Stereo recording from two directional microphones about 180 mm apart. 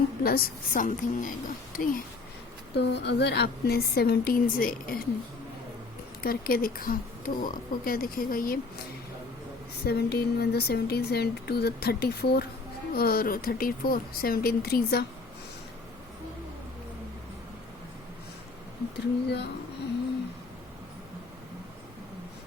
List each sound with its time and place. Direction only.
0.2 s speech: 55° left (ahead or behind)
2.7 s speech: 70° left (ahead or behind); by 5.0 s 55° left (ahead or behind)
6.2 s speech: 55° left (ahead or behind)
9.8 s speech: 60° left (ahead or behind)
18.9 s a sound: 70° left (ahead or behind)